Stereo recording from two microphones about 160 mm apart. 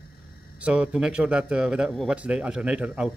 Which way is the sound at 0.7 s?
5° right (ahead or behind).